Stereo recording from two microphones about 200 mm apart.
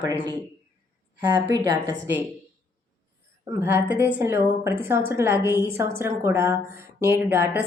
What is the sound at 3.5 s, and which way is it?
A woman's voice, 10° right (ahead or behind).